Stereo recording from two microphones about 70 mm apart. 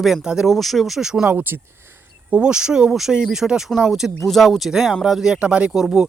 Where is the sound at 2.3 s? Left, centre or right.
Centre.